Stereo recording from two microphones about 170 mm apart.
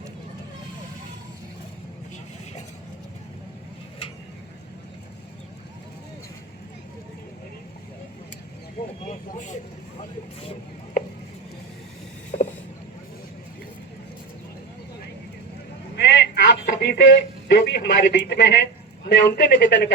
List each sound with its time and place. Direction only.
9.0 s speech: 45° left (ahead or behind)
11.0 s chopping: 60° left (ahead or behind)
12.3 s vehicle: 45° left (ahead or behind)
16.0 s a sound: 80° left
16.6 s a man's voice: 65° left (ahead or behind)